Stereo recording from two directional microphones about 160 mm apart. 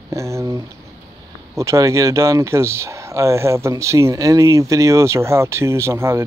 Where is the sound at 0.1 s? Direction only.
20° right (ahead or behind).